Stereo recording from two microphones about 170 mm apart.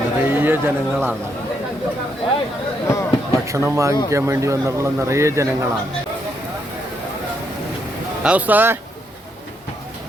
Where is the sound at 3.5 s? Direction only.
20° right (ahead or behind).